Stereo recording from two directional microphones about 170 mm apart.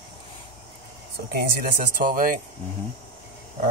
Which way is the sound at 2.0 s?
50° right (ahead or behind).